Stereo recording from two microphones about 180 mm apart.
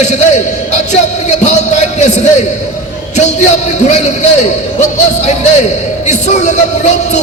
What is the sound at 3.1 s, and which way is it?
Speech, 40° left (ahead or behind).